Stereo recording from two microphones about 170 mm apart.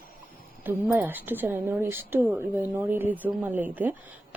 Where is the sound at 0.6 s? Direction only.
10° right (ahead or behind).